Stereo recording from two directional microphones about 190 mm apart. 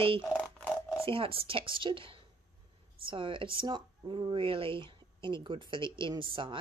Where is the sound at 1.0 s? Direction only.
30° right (ahead or behind).